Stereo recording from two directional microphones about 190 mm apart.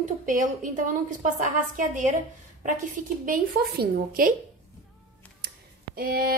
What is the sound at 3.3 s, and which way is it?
Speech, 50° right (ahead or behind).